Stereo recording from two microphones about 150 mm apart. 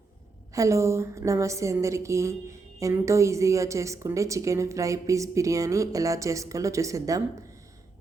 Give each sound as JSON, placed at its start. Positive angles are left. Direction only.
{"t": 0.5, "sound": "a woman's voice", "side_deg": -20}